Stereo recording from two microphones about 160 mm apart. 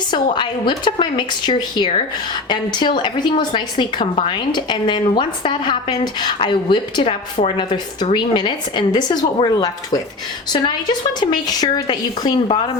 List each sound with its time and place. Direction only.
0.1 s a woman's voice: 30° left (ahead or behind)